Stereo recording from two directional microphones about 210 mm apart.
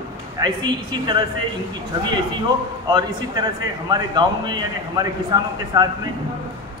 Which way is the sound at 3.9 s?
20° right (ahead or behind).